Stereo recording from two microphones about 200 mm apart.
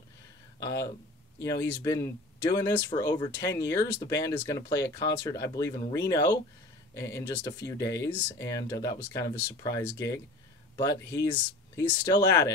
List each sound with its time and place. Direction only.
0.6 s speech: 15° left (ahead or behind)